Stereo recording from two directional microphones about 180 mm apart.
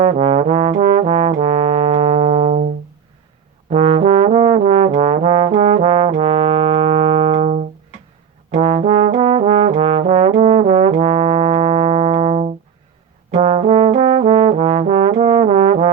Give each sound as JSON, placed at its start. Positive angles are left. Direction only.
{"t": 0.0, "sound": "trombone", "side_deg": -35}
{"t": 3.7, "sound": "trombone", "side_deg": -35}